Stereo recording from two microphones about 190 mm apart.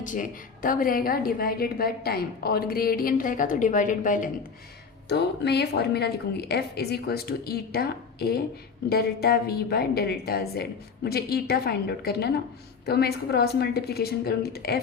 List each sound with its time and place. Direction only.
0.0 s a woman's voice: 45° left (ahead or behind)
5.0 s a woman's voice: 60° left (ahead or behind)